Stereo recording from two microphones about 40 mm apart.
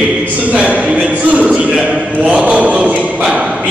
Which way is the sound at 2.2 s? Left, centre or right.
Right.